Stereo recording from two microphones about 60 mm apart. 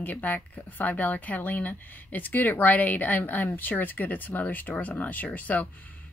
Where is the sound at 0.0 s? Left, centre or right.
Left.